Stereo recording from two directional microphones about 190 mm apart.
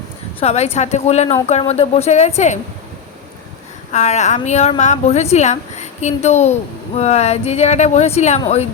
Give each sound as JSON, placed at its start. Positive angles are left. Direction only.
{"t": 0.3, "sound": "a woman's voice", "side_deg": 35}
{"t": 3.9, "sound": "a woman's voice", "side_deg": 40}